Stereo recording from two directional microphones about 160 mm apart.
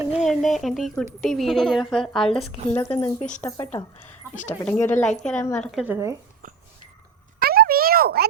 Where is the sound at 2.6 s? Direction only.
40° right (ahead or behind).